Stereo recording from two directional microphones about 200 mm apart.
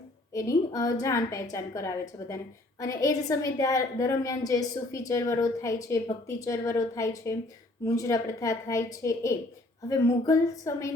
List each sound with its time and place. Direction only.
0.3 s a woman's voice: 15° left (ahead or behind)